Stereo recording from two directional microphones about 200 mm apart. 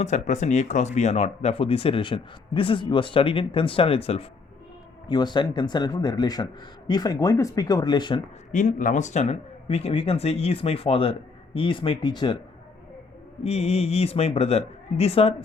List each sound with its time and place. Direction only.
0.0 s a woman's voice: 35° left (ahead or behind)
8.5 s speech: 40° left (ahead or behind)
13.4 s a woman's voice: 30° left (ahead or behind)